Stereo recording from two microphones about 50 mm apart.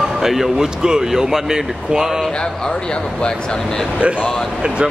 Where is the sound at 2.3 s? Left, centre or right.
Centre.